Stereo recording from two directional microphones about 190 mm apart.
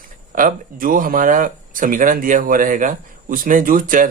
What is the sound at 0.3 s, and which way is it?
Speech, 45° right (ahead or behind).